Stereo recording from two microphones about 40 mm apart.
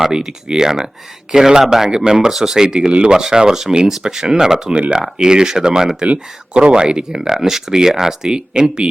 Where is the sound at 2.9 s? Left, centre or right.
Right.